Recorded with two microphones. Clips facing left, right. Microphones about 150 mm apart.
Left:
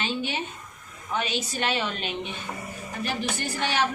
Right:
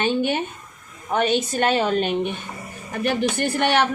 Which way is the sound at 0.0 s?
55° right (ahead or behind).